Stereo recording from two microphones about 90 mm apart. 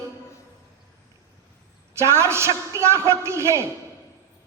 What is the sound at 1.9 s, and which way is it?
A man's voice, 30° right (ahead or behind).